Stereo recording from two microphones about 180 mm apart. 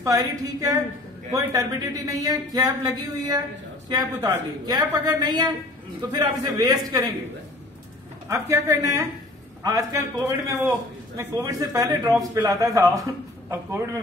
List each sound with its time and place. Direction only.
0.0 s a woman's voice: 20° right (ahead or behind)
3.9 s a woman's voice: 20° right (ahead or behind)
8.3 s a man's voice: 15° right (ahead or behind)